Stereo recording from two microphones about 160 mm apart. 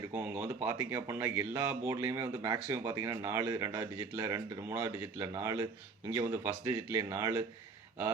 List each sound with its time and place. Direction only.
0.1 s speech: 10° right (ahead or behind)